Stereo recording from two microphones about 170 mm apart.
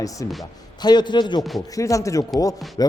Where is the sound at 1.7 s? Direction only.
20° left (ahead or behind).